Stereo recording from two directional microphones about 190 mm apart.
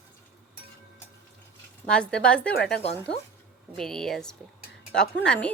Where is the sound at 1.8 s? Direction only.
5° left (ahead or behind).